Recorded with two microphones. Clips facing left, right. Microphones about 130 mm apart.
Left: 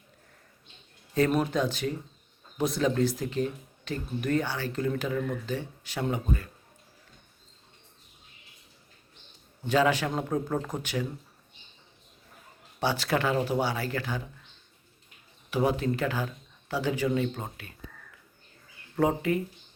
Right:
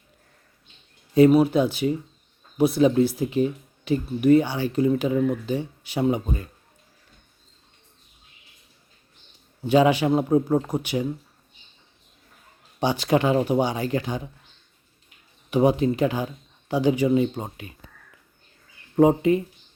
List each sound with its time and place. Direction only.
1.1 s speech: 10° right (ahead or behind)
9.6 s speech: 15° right (ahead or behind)
12.8 s speech: 15° right (ahead or behind)
15.4 s speech: 20° right (ahead or behind)
18.9 s speech: 20° right (ahead or behind)